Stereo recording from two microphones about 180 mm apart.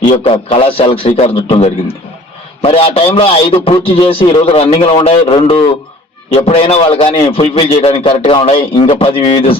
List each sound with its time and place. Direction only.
0.1 s a man's voice: 30° left (ahead or behind)